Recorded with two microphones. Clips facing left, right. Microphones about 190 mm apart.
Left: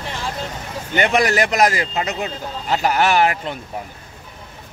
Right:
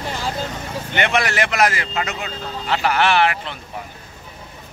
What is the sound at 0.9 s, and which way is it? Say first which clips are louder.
Speech: left 4 dB; 40° left (ahead or behind).